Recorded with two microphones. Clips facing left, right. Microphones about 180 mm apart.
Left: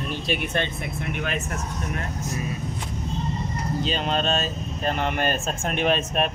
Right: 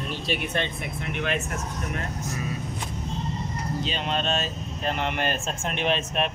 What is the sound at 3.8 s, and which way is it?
Speech, 40° left (ahead or behind).